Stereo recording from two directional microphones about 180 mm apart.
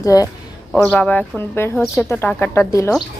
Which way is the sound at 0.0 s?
20° left (ahead or behind).